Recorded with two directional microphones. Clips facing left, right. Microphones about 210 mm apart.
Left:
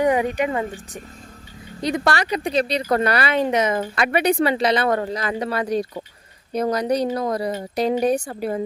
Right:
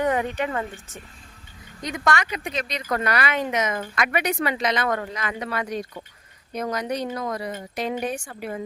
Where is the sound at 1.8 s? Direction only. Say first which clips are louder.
Left 4 dB; 35° left (ahead or behind).